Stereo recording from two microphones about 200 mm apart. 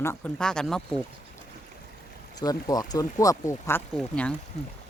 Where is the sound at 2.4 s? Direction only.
20° left (ahead or behind).